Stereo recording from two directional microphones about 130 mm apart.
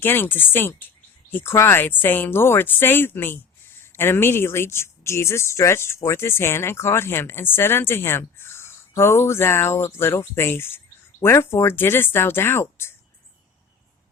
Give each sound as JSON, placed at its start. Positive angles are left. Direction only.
{"t": 0.0, "sound": "speech", "side_deg": 15}